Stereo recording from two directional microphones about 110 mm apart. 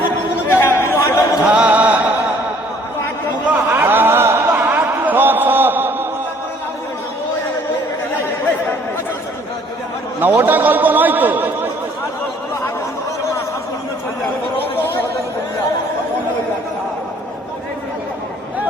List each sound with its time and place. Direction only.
0.5 s chatter: 20° left (ahead or behind)
1.5 s music: 10° right (ahead or behind)
3.5 s a sound: 20° right (ahead or behind)
10.2 s speech: 15° right (ahead or behind)